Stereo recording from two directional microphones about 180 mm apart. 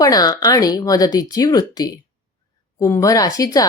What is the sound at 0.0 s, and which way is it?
A woman's voice, 20° left (ahead or behind).